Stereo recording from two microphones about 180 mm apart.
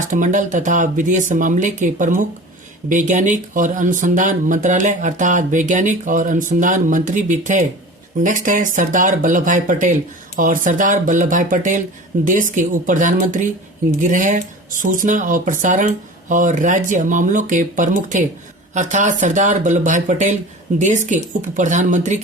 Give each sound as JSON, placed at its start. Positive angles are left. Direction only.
{"t": 0.1, "sound": "speech", "side_deg": -45}